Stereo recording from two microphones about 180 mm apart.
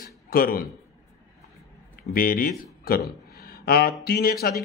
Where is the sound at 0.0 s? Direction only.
55° left (ahead or behind).